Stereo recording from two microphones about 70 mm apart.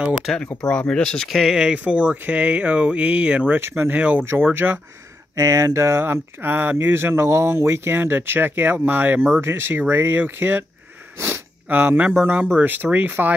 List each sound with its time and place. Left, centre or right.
0.6 s speech: centre
3.5 s speech: right
3.9 s speech: right
4.2 s speech: right
5.3 s speech: right